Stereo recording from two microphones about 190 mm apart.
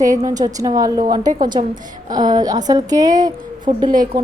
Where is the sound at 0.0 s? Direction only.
15° right (ahead or behind).